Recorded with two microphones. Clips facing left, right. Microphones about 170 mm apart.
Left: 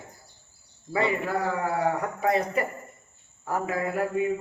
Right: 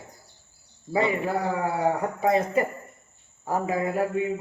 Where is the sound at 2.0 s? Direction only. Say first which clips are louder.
Right 2 dB; 25° right (ahead or behind).